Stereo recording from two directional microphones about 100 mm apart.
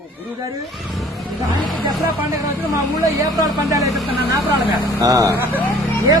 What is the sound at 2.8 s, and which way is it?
Speech, 35° right (ahead or behind).